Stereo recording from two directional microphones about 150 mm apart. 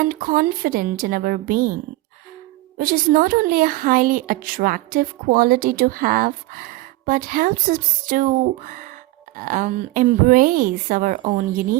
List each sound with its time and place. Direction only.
0.1 s a woman's voice: 75° right (ahead or behind)
2.7 s a woman's voice: 75° right (ahead or behind)